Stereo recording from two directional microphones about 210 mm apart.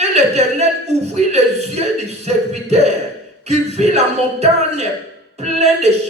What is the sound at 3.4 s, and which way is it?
Speech, 30° right (ahead or behind).